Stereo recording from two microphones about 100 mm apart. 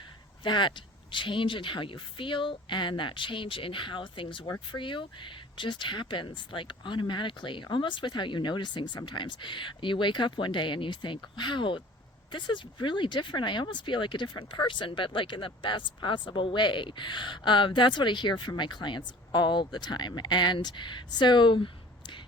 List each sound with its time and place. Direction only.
0.4 s speech: 55° left (ahead or behind)